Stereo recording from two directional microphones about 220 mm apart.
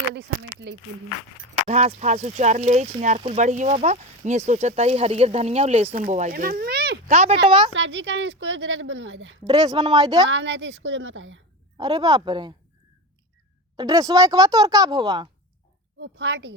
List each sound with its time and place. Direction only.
0.1 s a sound: 55° right (ahead or behind)
1.6 s speech: 30° right (ahead or behind); by 7.0 s 45° right (ahead or behind)
7.1 s speech: 30° right (ahead or behind)
7.8 s a woman's voice: 55° right (ahead or behind)
9.5 s speech: 15° right (ahead or behind)
10.2 s a woman's voice: 55° right (ahead or behind)
11.8 s speech: 20° right (ahead or behind)
13.7 s speech: 15° right (ahead or behind)
16.0 s a woman's voice: 50° right (ahead or behind)